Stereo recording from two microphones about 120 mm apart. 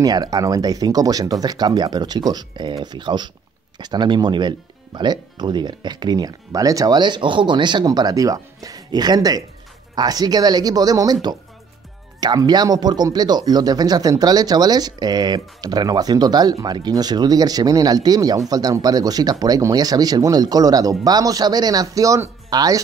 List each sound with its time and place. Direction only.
0.0 s speech: 30° right (ahead or behind)